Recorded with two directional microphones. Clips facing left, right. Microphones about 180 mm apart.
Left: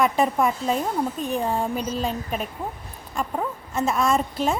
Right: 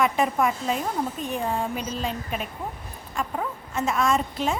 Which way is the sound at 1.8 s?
40° left (ahead or behind).